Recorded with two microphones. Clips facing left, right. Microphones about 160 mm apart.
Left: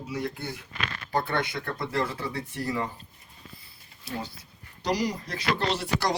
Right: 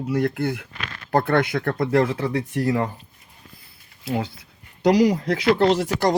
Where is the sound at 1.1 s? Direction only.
55° right (ahead or behind).